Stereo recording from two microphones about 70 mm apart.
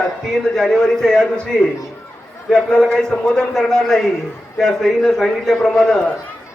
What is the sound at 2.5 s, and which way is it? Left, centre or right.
A man's voice, centre.